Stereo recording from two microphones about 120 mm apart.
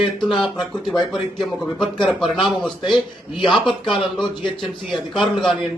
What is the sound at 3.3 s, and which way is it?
Speech, 40° left (ahead or behind).